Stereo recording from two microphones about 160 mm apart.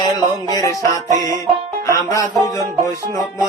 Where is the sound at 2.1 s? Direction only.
20° left (ahead or behind).